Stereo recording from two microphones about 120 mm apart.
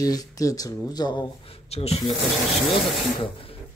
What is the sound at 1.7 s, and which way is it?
Speech, 60° left (ahead or behind).